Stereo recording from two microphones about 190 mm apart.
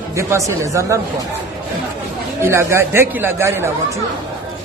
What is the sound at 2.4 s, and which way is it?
A man's voice, 15° right (ahead or behind).